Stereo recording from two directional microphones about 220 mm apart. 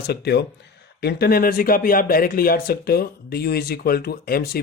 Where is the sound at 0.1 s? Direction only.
50° left (ahead or behind).